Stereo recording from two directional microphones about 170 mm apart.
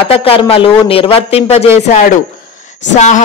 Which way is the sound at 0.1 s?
35° left (ahead or behind).